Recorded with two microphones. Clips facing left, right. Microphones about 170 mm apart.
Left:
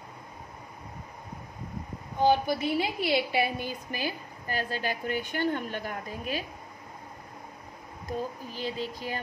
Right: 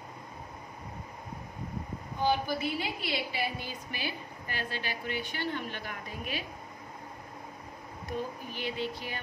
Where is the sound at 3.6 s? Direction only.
45° left (ahead or behind).